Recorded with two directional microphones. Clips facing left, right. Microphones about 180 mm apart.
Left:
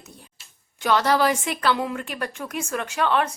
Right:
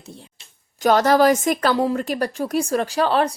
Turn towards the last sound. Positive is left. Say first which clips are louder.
# right 4 dB
turn(degrees=-35)  # may be behind; listen again after turning